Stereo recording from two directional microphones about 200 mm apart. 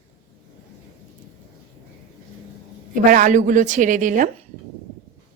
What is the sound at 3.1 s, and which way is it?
Speech, 40° right (ahead or behind).